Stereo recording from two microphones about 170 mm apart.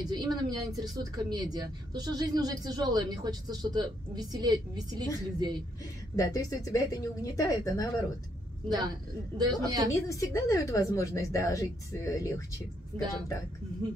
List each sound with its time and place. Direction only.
0.1 s speech: 25° right (ahead or behind)
6.1 s a woman's voice: 20° left (ahead or behind)
8.6 s speech: 25° right (ahead or behind)
10.0 s a woman's voice: 20° left (ahead or behind)